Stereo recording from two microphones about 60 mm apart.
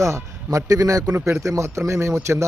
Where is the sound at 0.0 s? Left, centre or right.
Right.